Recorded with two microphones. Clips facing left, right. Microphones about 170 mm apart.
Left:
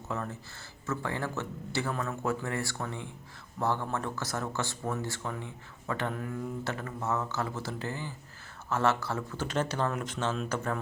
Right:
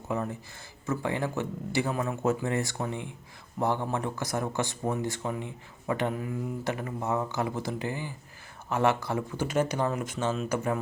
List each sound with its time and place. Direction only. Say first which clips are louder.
0.1 s speech: right 5 dB; 15° right (ahead or behind)